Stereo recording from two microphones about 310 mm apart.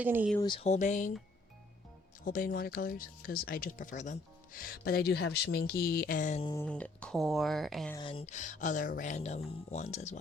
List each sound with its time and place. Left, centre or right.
0.0 s speech: centre
0.3 s speech: centre
2.2 s speech: left; by 7.9 s centre
7.9 s speech: centre